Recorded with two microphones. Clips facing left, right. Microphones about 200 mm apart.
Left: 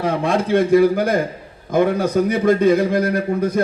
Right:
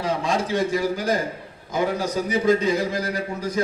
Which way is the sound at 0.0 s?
55° left (ahead or behind).